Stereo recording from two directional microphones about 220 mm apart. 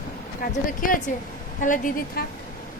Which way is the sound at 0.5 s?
35° left (ahead or behind).